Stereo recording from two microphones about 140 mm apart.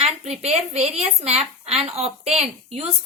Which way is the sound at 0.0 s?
50° right (ahead or behind).